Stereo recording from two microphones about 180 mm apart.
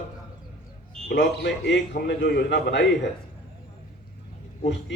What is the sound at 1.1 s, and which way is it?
A man's voice, 75° left (ahead or behind).